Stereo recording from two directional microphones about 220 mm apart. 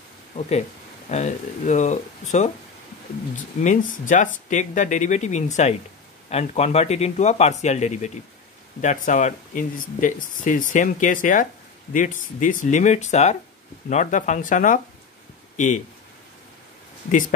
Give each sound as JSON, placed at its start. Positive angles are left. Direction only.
{"t": 0.5, "sound": "speech", "side_deg": 30}
{"t": 3.3, "sound": "speech", "side_deg": 35}